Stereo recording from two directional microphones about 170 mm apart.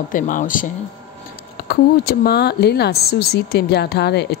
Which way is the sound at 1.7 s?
65° left (ahead or behind).